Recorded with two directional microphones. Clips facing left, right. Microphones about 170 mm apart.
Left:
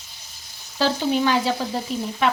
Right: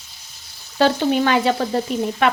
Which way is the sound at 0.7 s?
60° right (ahead or behind).